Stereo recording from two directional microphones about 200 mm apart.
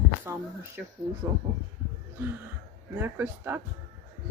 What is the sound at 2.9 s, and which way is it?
Speech, 10° right (ahead or behind).